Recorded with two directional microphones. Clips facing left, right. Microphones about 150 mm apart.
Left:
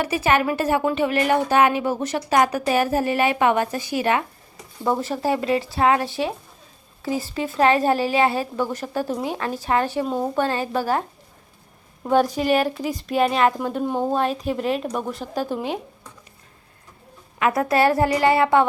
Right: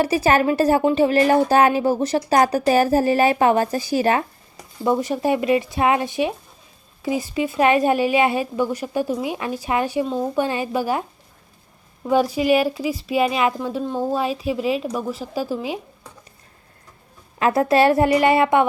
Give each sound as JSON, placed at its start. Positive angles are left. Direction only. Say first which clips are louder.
{"t": 0.0, "sound": "speech", "louder": "right 3 dB", "side_deg": -35}
{"t": 4.9, "sound": "speech", "louder": "right 2 dB", "side_deg": -15}
{"t": 12.1, "sound": "speech", "louder": "right 1 dB", "side_deg": -10}
{"t": 13.8, "sound": "speech", "louder": "left 2 dB", "side_deg": 15}
{"t": 14.1, "sound": "speech", "louder": "even", "side_deg": -5}
{"t": 17.4, "sound": "a woman's voice", "louder": "right 3 dB", "side_deg": -30}